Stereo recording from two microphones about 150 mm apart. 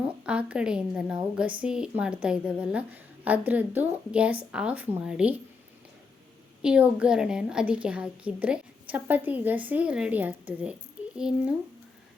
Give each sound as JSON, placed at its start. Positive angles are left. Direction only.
{"t": 0.3, "sound": "a woman's voice", "side_deg": -10}
{"t": 6.6, "sound": "a woman's voice", "side_deg": -5}